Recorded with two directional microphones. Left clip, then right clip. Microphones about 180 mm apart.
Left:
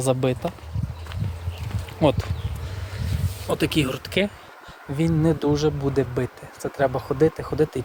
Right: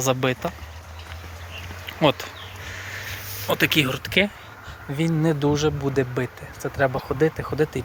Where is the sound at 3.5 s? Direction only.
5° left (ahead or behind).